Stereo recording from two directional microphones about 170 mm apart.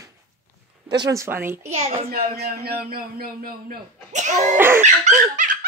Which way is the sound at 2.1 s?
60° right (ahead or behind).